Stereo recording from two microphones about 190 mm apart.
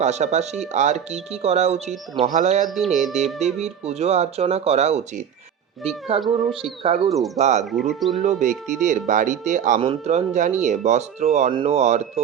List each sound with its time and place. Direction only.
0.0 s speech: 35° right (ahead or behind)
2.6 s speech: centre (ahead or behind)
3.4 s speech: 35° right (ahead or behind)
6.1 s speech: centre (ahead or behind)
6.8 s speech: 30° right (ahead or behind)
7.6 s speech: centre (ahead or behind)
8.2 s speech: 40° right (ahead or behind)